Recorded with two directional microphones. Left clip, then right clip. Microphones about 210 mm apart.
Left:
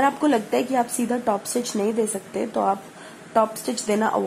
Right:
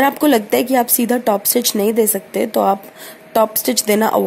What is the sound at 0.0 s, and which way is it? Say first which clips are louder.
Speech: right 6 dB; 30° right (ahead or behind).